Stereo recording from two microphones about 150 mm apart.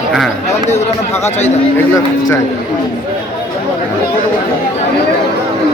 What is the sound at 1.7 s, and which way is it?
Speech, 20° left (ahead or behind).